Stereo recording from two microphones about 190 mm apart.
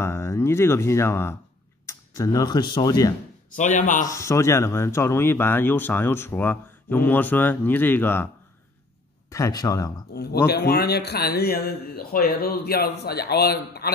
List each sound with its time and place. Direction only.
0.0 s speech: 15° left (ahead or behind)
3.5 s a man's voice: 40° left (ahead or behind)
4.1 s speech: 15° left (ahead or behind)
9.3 s speech: 20° left (ahead or behind)
10.1 s a man's voice: 55° left (ahead or behind)